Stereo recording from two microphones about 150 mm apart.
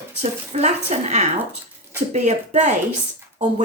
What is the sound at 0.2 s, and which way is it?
Speech, 45° right (ahead or behind).